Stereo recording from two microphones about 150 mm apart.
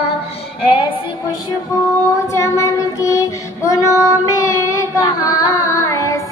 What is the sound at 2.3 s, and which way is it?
Child singing, 20° left (ahead or behind).